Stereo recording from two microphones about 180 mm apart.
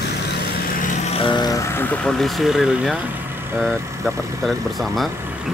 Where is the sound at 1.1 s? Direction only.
25° left (ahead or behind).